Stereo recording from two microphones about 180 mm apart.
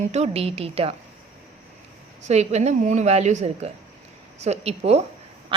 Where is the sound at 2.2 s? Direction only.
40° right (ahead or behind).